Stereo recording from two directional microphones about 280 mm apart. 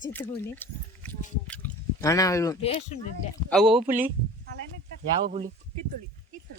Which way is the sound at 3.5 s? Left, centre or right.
Centre.